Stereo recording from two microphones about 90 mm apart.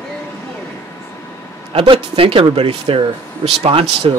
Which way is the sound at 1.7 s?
90° right.